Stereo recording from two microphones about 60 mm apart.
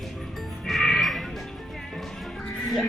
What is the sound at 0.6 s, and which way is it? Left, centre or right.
Music, centre.